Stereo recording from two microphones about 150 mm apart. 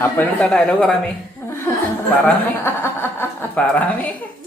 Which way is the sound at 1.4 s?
20° left (ahead or behind).